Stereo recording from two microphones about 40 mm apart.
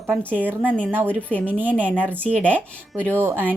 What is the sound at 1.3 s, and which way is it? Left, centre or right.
Speech, left.